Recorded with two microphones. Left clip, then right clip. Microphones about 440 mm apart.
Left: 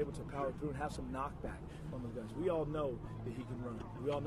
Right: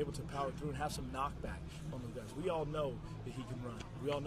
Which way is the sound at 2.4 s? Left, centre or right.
Right.